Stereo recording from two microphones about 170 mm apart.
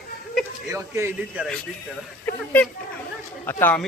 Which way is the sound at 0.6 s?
15° right (ahead or behind).